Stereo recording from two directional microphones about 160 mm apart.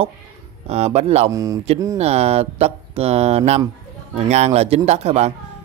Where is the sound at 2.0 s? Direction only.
40° right (ahead or behind).